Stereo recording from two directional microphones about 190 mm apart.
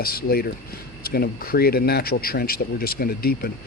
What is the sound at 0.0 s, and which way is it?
Speech, 50° left (ahead or behind).